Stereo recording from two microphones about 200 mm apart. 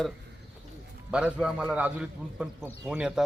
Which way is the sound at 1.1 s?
5° right (ahead or behind).